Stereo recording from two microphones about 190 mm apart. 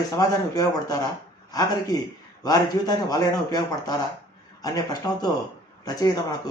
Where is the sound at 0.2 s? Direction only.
20° left (ahead or behind).